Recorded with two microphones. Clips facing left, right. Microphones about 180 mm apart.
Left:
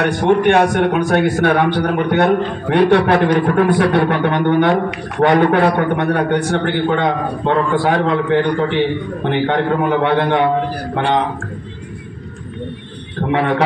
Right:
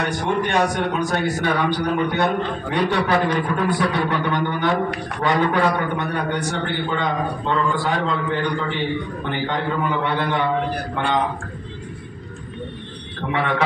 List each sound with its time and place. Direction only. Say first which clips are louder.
0.0 s a man's voice: left 9 dB; 60° left (ahead or behind)
13.3 s a man's voice: left 6 dB; 45° left (ahead or behind)